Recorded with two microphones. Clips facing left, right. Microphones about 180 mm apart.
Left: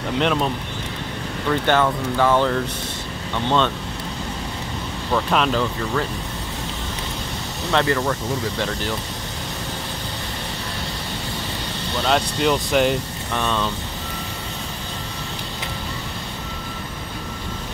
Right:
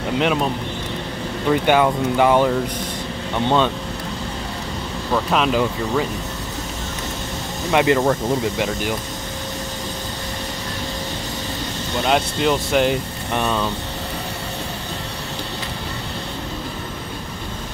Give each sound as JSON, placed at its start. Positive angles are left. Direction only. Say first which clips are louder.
{"t": 0.2, "sound": "speech", "louder": "even", "side_deg": -5}
{"t": 1.5, "sound": "speech", "louder": "right 3 dB", "side_deg": -10}
{"t": 5.1, "sound": "speech", "louder": "right 1 dB", "side_deg": -5}
{"t": 7.7, "sound": "speech", "louder": "right 4 dB", "side_deg": -15}
{"t": 12.0, "sound": "speech", "louder": "right 1 dB", "side_deg": -5}
{"t": 13.3, "sound": "speech", "louder": "right 2 dB", "side_deg": -10}